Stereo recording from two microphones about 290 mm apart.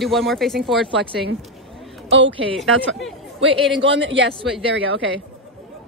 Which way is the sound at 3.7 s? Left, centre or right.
Right.